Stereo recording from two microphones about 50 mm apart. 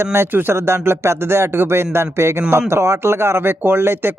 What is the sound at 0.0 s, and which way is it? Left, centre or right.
Speech, right.